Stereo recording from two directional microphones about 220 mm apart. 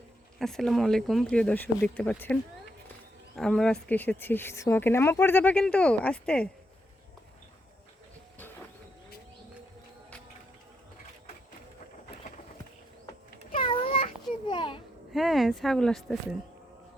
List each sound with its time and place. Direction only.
0.3 s speech: centre (ahead or behind)
13.3 s cat: 40° left (ahead or behind)
14.4 s a sound: 20° left (ahead or behind)
15.1 s speech: centre (ahead or behind)